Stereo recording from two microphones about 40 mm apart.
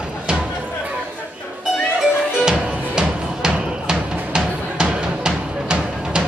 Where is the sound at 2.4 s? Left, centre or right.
Centre.